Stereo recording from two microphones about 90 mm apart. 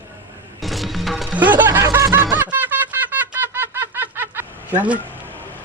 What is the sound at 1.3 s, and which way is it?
Music, 20° right (ahead or behind).